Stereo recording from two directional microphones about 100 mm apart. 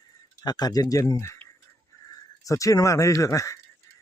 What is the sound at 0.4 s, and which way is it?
Speech, 40° left (ahead or behind).